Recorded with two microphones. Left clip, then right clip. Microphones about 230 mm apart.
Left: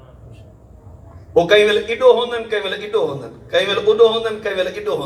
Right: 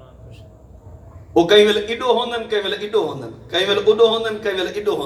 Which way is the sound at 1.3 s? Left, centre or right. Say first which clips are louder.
Even; right.